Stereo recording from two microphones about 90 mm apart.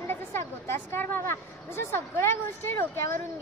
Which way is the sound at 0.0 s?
25° left (ahead or behind).